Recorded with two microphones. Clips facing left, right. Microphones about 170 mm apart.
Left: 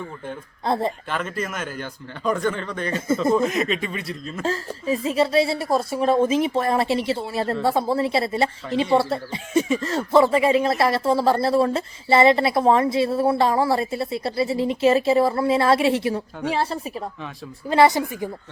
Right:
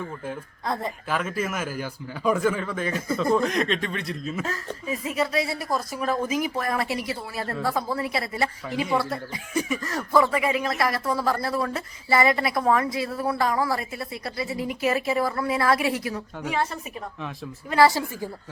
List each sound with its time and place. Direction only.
0.6 s speech: 30° left (ahead or behind)
1.1 s speech: 5° right (ahead or behind)
4.4 s a woman's voice: 30° left (ahead or behind)
17.7 s a woman's voice: 20° left (ahead or behind)